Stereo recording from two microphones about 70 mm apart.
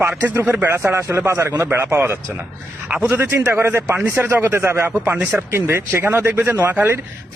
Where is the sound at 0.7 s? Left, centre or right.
Right.